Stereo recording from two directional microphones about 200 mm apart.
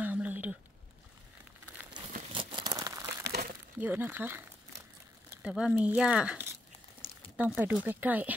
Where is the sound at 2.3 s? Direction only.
25° right (ahead or behind).